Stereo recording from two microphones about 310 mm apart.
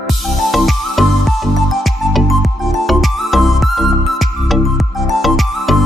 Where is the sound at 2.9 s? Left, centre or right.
Centre.